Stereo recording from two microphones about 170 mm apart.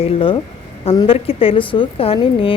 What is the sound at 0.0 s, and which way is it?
A woman's voice, 30° left (ahead or behind).